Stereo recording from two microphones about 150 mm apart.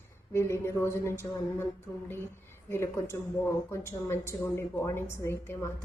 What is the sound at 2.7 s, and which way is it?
A woman's voice, 20° left (ahead or behind).